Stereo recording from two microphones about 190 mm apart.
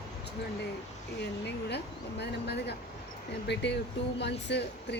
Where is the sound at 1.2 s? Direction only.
65° left (ahead or behind).